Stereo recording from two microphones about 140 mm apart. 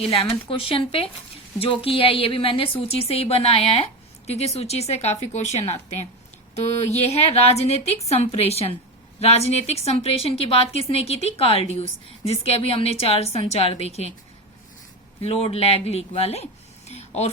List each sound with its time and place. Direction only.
0.0 s a woman's voice: 45° left (ahead or behind)
15.2 s a woman's voice: 45° left (ahead or behind)
16.9 s a sound: 50° left (ahead or behind)